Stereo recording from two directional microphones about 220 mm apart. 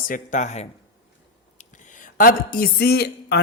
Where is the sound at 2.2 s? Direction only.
40° left (ahead or behind).